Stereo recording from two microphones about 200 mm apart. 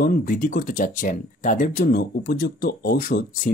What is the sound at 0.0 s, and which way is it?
Speech, 45° left (ahead or behind).